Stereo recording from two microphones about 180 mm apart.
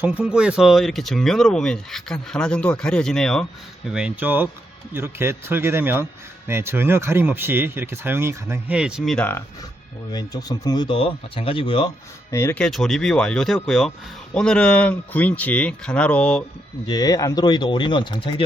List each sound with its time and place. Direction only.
0.0 s speech: 5° right (ahead or behind); by 9.4 s 10° left (ahead or behind)
10.1 s speech: 25° left (ahead or behind)
12.3 s speech: 15° left (ahead or behind)
16.8 s speech: 20° left (ahead or behind)